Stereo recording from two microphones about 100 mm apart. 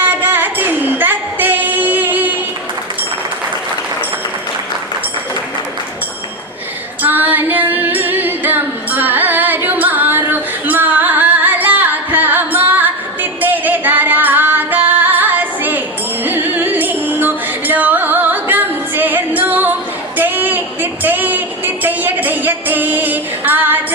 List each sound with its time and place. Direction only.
0.0 s singing: 20° right (ahead or behind)
7.0 s female singing: 20° right (ahead or behind)
13.4 s music: 20° right (ahead or behind)
20.1 s a sound: 20° right (ahead or behind)